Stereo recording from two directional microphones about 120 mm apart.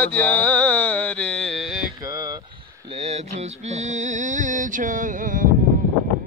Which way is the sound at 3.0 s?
65° right (ahead or behind).